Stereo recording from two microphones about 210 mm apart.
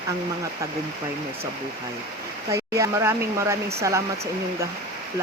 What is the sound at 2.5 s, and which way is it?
Speech, 15° right (ahead or behind).